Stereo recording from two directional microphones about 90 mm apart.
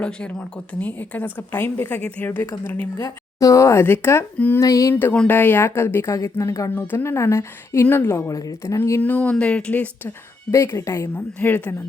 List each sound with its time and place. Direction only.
0.0 s a woman's voice: 10° left (ahead or behind)
4.6 s a woman's voice: 35° left (ahead or behind)
5.1 s speech: 10° left (ahead or behind)
5.4 s a woman's voice: 25° left (ahead or behind)
8.3 s a woman's voice: 40° left (ahead or behind)
9.0 s speech: 15° left (ahead or behind)
10.5 s a woman's voice: 30° left (ahead or behind)
11.3 s a woman's voice: 20° left (ahead or behind)